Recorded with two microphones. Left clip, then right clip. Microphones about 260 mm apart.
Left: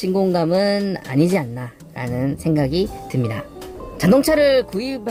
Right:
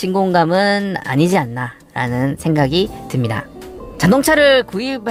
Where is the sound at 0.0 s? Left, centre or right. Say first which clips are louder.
Right 4 dB; centre.